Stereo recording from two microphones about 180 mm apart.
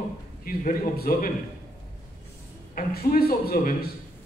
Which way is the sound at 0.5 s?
55° left (ahead or behind).